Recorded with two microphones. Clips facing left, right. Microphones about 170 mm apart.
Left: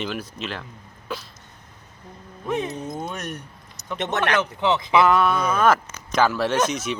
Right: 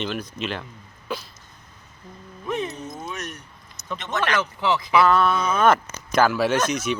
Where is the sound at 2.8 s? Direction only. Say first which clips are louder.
Left 3 dB; 60° left (ahead or behind).